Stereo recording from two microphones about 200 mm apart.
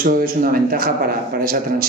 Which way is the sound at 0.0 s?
45° right (ahead or behind).